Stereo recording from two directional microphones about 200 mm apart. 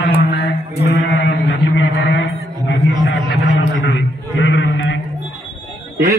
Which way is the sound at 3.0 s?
70° left (ahead or behind).